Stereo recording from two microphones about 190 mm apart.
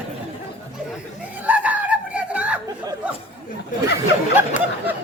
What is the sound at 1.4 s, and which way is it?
Screaming, 10° right (ahead or behind).